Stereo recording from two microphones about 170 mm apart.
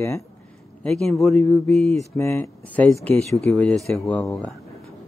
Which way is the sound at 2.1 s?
15° left (ahead or behind).